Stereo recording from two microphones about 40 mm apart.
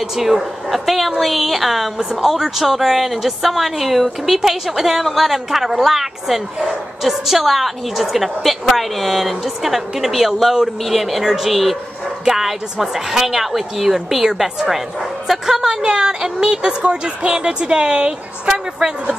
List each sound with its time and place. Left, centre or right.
0.1 s a woman's voice: centre